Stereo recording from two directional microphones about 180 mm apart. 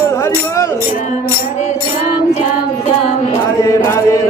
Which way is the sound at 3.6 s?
15° left (ahead or behind).